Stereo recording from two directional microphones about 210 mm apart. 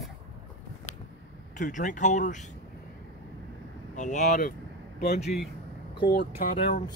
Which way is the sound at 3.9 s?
35° left (ahead or behind).